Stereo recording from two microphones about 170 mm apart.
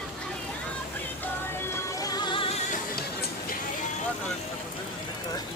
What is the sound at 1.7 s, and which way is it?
Music, 20° left (ahead or behind).